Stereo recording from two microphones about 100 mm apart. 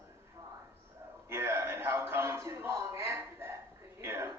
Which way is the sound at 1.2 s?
25° right (ahead or behind).